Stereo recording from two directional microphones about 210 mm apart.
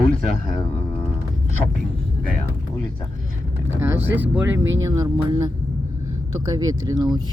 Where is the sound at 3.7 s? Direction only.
10° right (ahead or behind).